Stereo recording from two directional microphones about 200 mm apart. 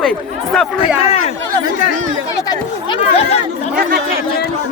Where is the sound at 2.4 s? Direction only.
20° left (ahead or behind).